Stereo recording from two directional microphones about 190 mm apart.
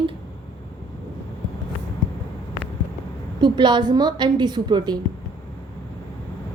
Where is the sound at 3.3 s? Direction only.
25° right (ahead or behind).